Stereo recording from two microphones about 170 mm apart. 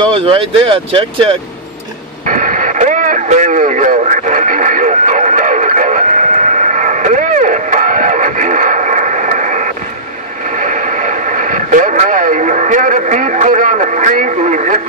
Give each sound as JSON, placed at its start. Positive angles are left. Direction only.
{"t": 0.2, "sound": "speech", "side_deg": -30}
{"t": 2.2, "sound": "radio", "side_deg": -50}